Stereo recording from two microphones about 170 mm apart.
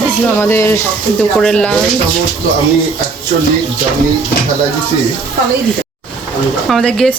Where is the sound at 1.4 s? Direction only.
5° left (ahead or behind).